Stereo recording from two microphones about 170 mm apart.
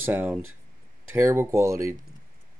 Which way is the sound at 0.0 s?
10° right (ahead or behind).